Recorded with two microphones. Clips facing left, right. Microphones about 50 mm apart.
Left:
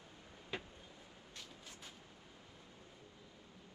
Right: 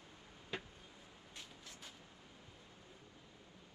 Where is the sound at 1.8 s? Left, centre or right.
Left.